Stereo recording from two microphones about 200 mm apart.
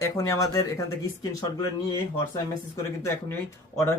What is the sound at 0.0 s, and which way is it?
Speech, 15° left (ahead or behind).